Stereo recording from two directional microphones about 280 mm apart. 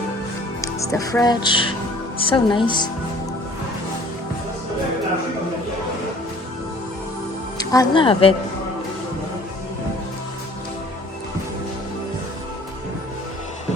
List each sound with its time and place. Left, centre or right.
0.6 s speech: centre
7.6 s speech: centre